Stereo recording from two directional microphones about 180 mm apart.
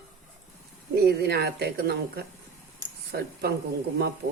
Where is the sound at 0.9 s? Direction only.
65° right (ahead or behind).